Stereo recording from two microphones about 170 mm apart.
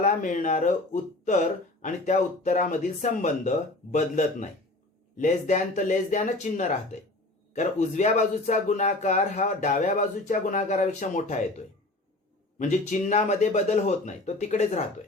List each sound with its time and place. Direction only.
0.0 s speech: 50° left (ahead or behind)
1.8 s speech: 45° left (ahead or behind)
12.5 s speech: 45° left (ahead or behind)